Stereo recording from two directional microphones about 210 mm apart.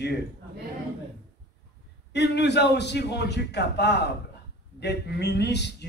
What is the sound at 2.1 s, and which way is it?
A man's voice, 55° left (ahead or behind).